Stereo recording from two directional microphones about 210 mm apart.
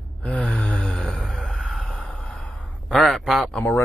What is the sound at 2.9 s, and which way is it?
Speech, centre (ahead or behind).